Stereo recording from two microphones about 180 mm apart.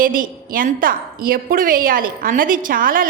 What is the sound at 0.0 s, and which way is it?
A woman's voice, 50° right (ahead or behind).